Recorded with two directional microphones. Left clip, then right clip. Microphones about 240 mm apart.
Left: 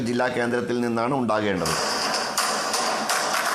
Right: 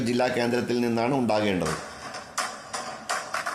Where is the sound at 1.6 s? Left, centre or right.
Left.